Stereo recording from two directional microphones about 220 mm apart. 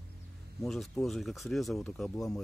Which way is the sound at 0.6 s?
Centre (ahead or behind).